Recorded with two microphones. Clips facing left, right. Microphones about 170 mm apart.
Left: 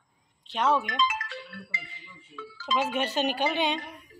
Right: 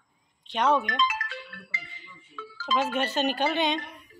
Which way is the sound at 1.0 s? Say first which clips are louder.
Even; 25° left (ahead or behind).